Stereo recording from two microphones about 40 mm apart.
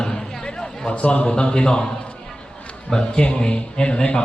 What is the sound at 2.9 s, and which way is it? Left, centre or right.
Speech, centre.